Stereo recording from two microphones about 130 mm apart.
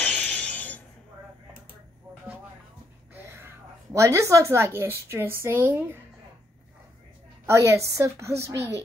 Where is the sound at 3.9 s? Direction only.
25° right (ahead or behind).